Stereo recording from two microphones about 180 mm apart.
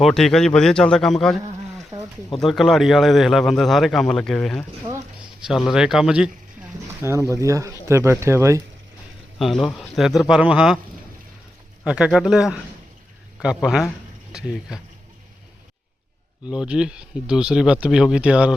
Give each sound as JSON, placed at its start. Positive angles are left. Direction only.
{"t": 0.0, "sound": "a man's voice", "side_deg": 0}
{"t": 1.9, "sound": "a sound", "side_deg": -20}
{"t": 2.4, "sound": "a man's voice", "side_deg": 0}
{"t": 9.4, "sound": "a man's voice", "side_deg": 0}
{"t": 11.9, "sound": "a man's voice", "side_deg": -5}
{"t": 16.5, "sound": "a man's voice", "side_deg": -5}